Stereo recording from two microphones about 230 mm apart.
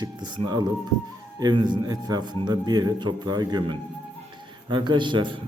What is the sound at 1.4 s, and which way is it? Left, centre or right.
A man's voice, centre.